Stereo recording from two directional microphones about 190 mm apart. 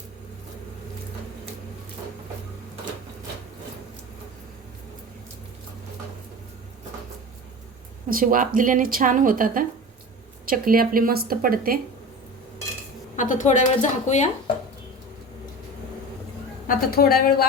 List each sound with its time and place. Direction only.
8.1 s a woman's voice: 45° right (ahead or behind)
13.1 s speech: 40° left (ahead or behind)
16.6 s a woman's voice: 50° left (ahead or behind)